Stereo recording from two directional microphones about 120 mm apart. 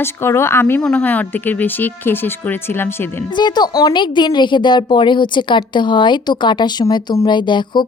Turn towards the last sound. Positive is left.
turn(degrees=40)  # may be behind; listen again after turning